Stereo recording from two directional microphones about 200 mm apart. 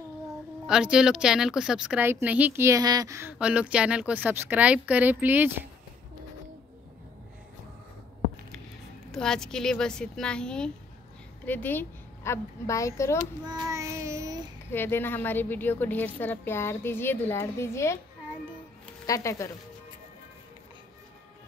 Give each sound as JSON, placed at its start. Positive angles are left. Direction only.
{"t": 0.7, "sound": "speech", "side_deg": -5}
{"t": 9.1, "sound": "a woman's voice", "side_deg": 5}
{"t": 13.5, "sound": "child singing", "side_deg": -20}
{"t": 14.7, "sound": "a woman's voice", "side_deg": 10}
{"t": 19.0, "sound": "a woman's voice", "side_deg": 15}